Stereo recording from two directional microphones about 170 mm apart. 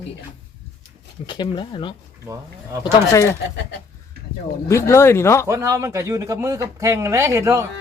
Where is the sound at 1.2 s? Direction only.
30° left (ahead or behind).